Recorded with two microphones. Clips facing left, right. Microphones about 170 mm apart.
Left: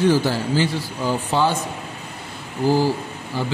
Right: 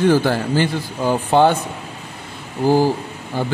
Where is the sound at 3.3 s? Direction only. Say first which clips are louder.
Right 3 dB; 50° right (ahead or behind).